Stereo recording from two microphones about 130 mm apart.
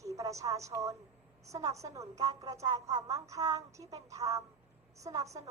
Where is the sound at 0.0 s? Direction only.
25° right (ahead or behind).